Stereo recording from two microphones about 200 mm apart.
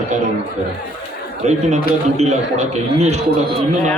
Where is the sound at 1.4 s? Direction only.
30° right (ahead or behind).